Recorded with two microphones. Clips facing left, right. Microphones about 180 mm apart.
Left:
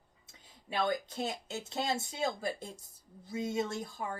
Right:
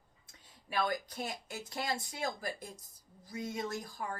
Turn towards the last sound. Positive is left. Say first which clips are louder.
# left 4 dB
turn(degrees=25)  # may be behind; listen again after turning